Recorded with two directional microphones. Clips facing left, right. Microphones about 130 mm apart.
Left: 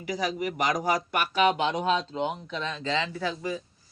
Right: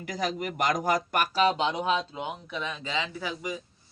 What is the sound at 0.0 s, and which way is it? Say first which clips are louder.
Speech: left 2 dB; 50° right (ahead or behind).